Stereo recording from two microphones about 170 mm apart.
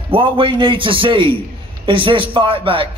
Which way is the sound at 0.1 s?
30° right (ahead or behind).